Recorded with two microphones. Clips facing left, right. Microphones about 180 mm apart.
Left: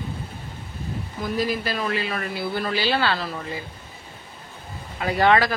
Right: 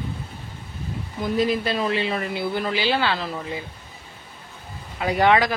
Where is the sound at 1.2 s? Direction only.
25° right (ahead or behind).